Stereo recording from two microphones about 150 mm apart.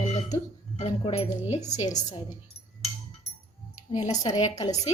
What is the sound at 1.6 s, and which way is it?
Speech, 25° left (ahead or behind).